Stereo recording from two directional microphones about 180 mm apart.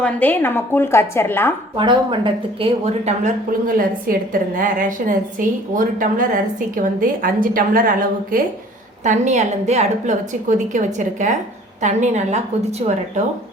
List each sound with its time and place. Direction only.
0.0 s a woman's voice: 10° left (ahead or behind)
1.7 s speech: 25° right (ahead or behind)
3.7 s a woman's voice: 50° right (ahead or behind)
9.0 s a woman's voice: 40° right (ahead or behind)